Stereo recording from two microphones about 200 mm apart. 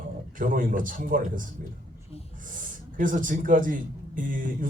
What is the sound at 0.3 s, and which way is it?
Speech, 40° right (ahead or behind).